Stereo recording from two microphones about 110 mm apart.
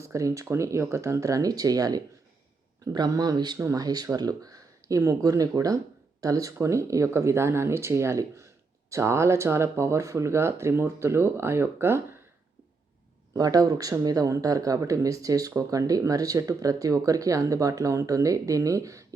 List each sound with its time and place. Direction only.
0.0 s speech: 30° right (ahead or behind)
13.3 s speech: 35° right (ahead or behind)